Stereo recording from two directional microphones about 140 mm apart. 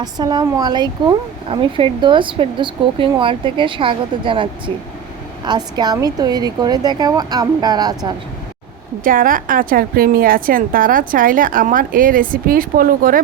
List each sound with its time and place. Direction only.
0.0 s a woman's voice: 30° right (ahead or behind)
9.0 s a woman's voice: 80° right